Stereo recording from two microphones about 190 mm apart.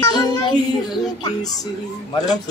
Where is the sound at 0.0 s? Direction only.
20° left (ahead or behind).